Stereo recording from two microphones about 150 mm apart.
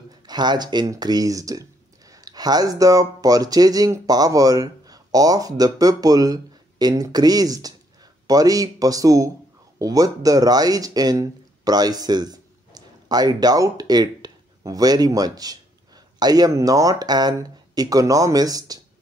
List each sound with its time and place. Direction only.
0.1 s speech: 30° right (ahead or behind)